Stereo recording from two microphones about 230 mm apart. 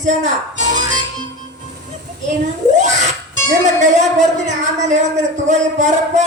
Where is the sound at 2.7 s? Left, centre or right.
Right.